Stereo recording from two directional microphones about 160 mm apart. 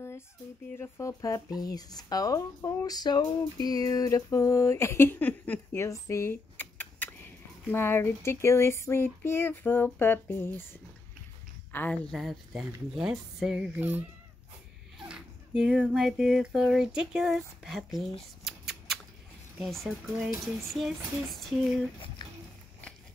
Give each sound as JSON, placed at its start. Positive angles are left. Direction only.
{"t": 0.7, "sound": "speech", "side_deg": 15}
{"t": 15.0, "sound": "speech", "side_deg": -5}
{"t": 18.4, "sound": "scissors", "side_deg": 0}
{"t": 19.6, "sound": "speech", "side_deg": 0}